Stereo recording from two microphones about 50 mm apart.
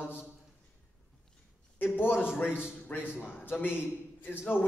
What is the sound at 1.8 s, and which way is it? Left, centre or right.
A man's voice, left.